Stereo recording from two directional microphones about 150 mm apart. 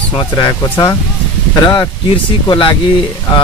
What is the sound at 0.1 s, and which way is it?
Speech, 25° left (ahead or behind).